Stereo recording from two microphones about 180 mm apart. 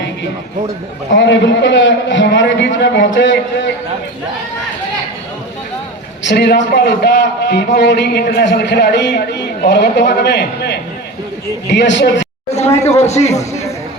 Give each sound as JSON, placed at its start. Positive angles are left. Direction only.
{"t": 1.1, "sound": "a man's voice", "side_deg": 90}
{"t": 6.2, "sound": "a man's voice", "side_deg": 65}
{"t": 12.5, "sound": "speech", "side_deg": 35}